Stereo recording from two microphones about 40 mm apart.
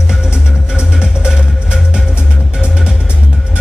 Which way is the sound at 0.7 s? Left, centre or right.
Right.